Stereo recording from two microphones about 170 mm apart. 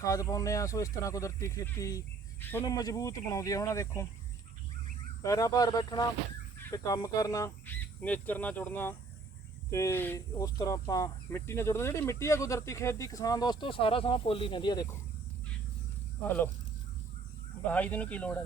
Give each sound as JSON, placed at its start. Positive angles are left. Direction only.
{"t": 0.0, "sound": "speech", "side_deg": 20}
{"t": 5.2, "sound": "speech", "side_deg": 20}
{"t": 16.2, "sound": "speech", "side_deg": 10}
{"t": 17.7, "sound": "speech", "side_deg": 10}